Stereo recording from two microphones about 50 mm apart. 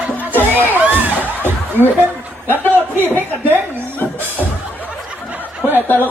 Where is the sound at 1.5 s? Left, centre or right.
Right.